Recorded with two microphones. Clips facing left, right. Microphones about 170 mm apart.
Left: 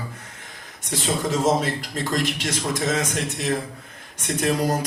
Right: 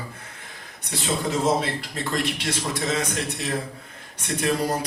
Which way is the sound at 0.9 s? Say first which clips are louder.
Left 2 dB; 45° left (ahead or behind).